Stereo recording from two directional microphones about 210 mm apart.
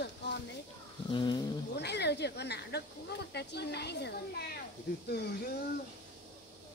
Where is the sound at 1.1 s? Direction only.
20° left (ahead or behind).